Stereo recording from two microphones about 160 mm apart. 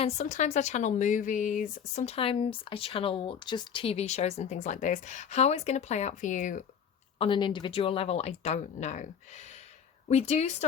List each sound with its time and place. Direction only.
0.0 s speech: 50° left (ahead or behind)
7.2 s speech: 30° left (ahead or behind)